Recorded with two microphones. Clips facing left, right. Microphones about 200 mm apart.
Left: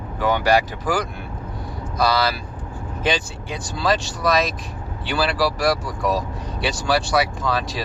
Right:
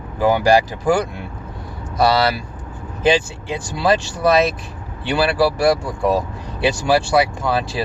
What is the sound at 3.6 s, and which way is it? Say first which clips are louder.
Speech: right 4 dB; 25° right (ahead or behind).